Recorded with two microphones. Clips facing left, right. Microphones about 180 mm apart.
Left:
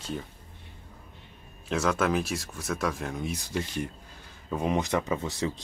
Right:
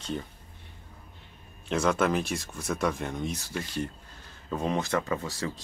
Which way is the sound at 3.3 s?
20° left (ahead or behind).